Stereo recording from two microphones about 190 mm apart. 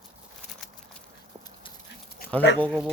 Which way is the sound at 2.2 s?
50° left (ahead or behind).